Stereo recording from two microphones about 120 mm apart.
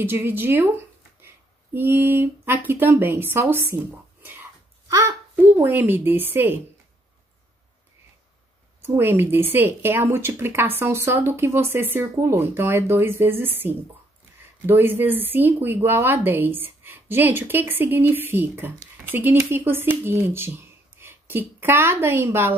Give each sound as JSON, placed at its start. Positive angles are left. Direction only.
{"t": 0.0, "sound": "a child's voice", "side_deg": -15}
{"t": 8.8, "sound": "speech", "side_deg": -20}